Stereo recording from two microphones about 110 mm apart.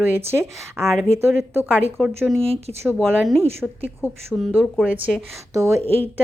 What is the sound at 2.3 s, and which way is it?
Speech, 60° right (ahead or behind).